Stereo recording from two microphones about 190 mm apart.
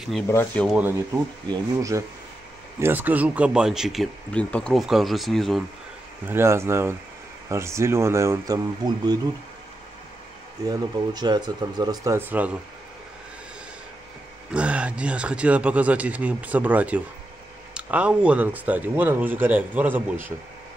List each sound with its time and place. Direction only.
0.3 s speech: 10° left (ahead or behind)
0.7 s speech: 10° right (ahead or behind)
6.2 s speech: 15° right (ahead or behind)
10.6 s speech: 20° right (ahead or behind)
14.5 s speech: 5° right (ahead or behind)